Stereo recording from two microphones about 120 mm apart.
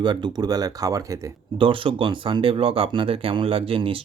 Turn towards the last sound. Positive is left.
turn(degrees=-50)  # may be behind; listen again after turning